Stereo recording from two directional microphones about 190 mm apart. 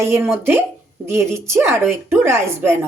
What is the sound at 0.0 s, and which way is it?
Speech, 10° right (ahead or behind).